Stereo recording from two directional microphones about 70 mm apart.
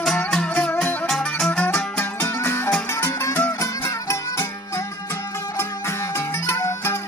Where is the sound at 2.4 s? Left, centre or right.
Left.